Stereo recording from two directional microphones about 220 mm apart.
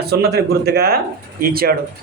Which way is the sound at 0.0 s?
45° right (ahead or behind).